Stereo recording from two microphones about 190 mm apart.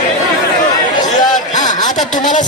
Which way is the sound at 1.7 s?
40° left (ahead or behind).